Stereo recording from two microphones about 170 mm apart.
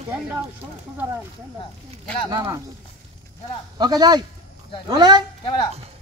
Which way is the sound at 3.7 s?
25° right (ahead or behind).